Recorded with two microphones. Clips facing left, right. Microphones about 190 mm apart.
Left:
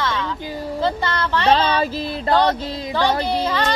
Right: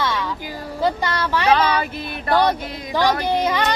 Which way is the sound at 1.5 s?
30° left (ahead or behind).